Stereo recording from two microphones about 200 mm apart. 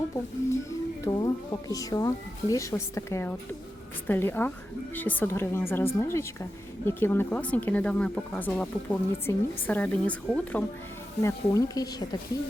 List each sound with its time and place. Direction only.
1.0 s a woman's voice: 20° left (ahead or behind)